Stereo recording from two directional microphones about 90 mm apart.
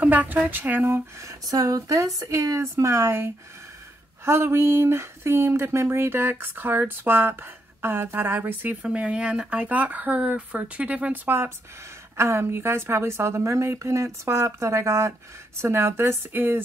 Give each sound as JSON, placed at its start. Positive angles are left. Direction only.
{"t": 0.0, "sound": "speech", "side_deg": -20}
{"t": 8.8, "sound": "speech", "side_deg": -10}